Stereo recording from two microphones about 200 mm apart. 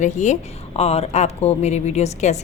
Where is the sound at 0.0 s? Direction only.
35° left (ahead or behind).